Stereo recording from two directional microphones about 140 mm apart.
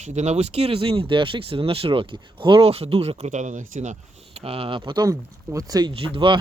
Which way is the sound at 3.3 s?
60° right (ahead or behind).